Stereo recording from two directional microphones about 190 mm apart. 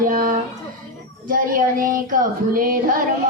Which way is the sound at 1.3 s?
45° right (ahead or behind).